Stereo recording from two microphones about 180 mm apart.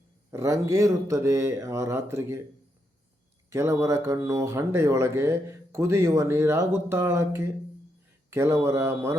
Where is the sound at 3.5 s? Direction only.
15° right (ahead or behind).